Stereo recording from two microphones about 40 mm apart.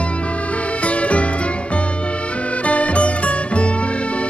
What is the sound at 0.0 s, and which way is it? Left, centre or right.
Music, left.